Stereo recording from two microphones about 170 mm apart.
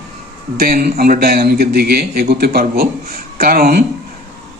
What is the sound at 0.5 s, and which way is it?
Speech, 60° right (ahead or behind).